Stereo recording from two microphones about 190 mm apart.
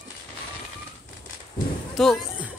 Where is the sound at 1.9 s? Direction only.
Centre (ahead or behind).